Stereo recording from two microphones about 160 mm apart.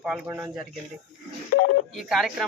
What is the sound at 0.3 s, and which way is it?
Speech, 15° right (ahead or behind).